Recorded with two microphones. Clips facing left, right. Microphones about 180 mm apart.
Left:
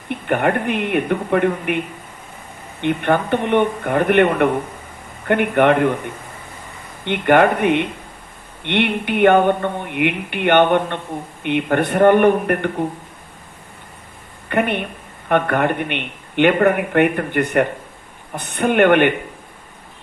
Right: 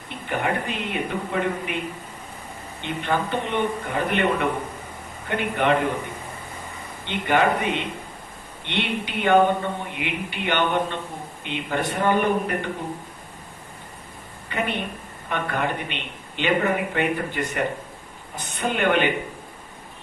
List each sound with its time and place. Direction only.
0.1 s speech: 60° left (ahead or behind)
2.8 s speech: 60° left (ahead or behind)
7.0 s speech: 60° left (ahead or behind)
14.4 s a woman's voice: 60° left (ahead or behind)